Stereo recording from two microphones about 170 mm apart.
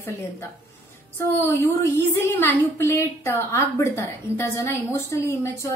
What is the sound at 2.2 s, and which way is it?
A woman's voice, 15° left (ahead or behind).